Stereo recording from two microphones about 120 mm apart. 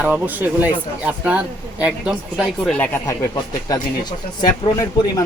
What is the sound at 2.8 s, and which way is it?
Speech, 20° left (ahead or behind).